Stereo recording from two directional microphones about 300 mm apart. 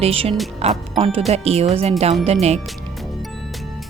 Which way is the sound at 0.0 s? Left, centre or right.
Centre.